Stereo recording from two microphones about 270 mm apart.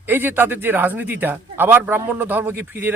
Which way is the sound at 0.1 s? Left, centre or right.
Centre.